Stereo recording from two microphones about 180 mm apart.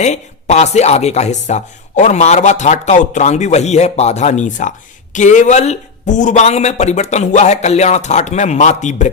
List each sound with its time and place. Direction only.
0.0 s speech: 40° left (ahead or behind)